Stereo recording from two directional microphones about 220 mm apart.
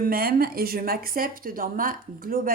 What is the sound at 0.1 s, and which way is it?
A woman's voice, 40° right (ahead or behind).